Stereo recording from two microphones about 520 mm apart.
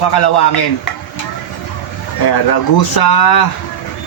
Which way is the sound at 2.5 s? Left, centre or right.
Left.